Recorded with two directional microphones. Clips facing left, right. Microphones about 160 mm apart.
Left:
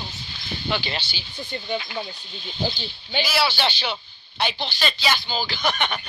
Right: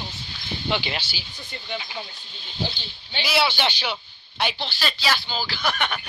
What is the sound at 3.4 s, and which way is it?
A woman's voice, 15° right (ahead or behind).